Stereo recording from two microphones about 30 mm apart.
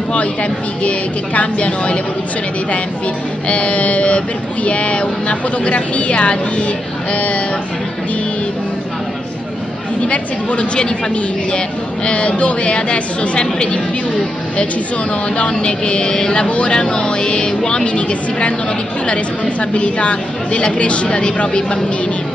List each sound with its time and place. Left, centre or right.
0.1 s speech: left
3.4 s speech: left
7.1 s speech: left
10.0 s speech: left
15.5 s speech: left
16.3 s speech: left
16.7 s speech: left
19.6 s speech: left